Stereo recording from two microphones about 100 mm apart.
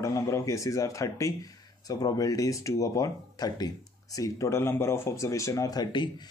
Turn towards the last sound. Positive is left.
turn(degrees=50)  # may be behind; listen again after turning